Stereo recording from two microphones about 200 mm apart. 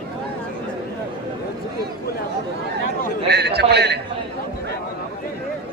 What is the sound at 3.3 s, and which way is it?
Speech, 55° right (ahead or behind).